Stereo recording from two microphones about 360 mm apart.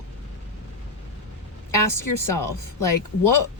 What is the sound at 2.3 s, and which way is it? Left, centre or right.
Speech, left.